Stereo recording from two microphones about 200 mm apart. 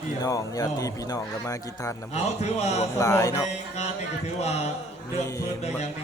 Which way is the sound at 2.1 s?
35° left (ahead or behind).